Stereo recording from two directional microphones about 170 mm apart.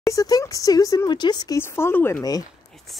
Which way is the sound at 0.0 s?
20° left (ahead or behind).